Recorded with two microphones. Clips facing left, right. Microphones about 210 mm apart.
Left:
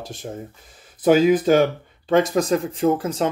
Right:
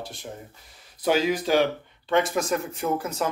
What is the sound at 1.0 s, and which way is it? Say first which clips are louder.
Speech: left 8 dB; 50° left (ahead or behind).